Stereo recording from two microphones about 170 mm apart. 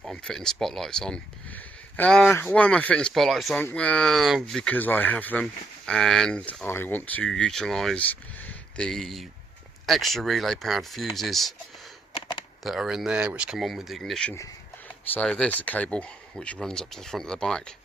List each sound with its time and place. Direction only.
0.0 s speech: 5° left (ahead or behind)
12.1 s a sound: 30° left (ahead or behind)
12.6 s speech: centre (ahead or behind)